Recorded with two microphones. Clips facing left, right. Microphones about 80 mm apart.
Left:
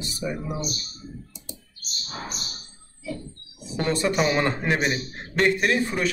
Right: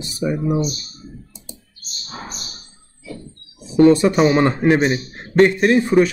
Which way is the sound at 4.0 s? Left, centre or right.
Right.